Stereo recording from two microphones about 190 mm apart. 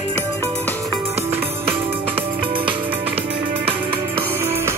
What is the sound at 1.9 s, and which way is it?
Music, 30° right (ahead or behind).